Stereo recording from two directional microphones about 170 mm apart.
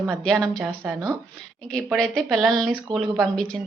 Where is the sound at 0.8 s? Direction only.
20° right (ahead or behind).